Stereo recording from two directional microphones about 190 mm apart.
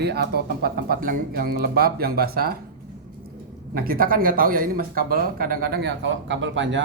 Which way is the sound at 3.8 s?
50° right (ahead or behind).